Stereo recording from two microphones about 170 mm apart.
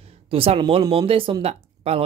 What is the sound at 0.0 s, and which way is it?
Speech, 35° right (ahead or behind).